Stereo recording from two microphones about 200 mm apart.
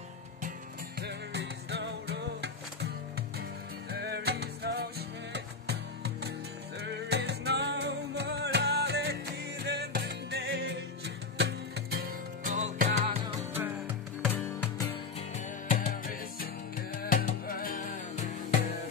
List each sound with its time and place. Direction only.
1.0 s music: 55° right (ahead or behind)
3.9 s music: 55° right (ahead or behind)
13.0 s music: 30° right (ahead or behind)
13.6 s music: 10° right (ahead or behind)
14.3 s music: 10° left (ahead or behind)
15.8 s music: 45° left (ahead or behind)